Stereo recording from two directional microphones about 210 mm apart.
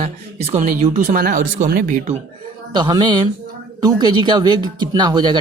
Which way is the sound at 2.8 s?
20° right (ahead or behind).